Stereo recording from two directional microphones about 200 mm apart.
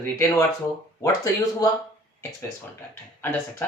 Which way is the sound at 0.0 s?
15° left (ahead or behind).